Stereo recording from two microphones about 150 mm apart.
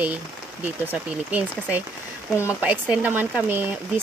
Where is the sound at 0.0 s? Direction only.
10° right (ahead or behind).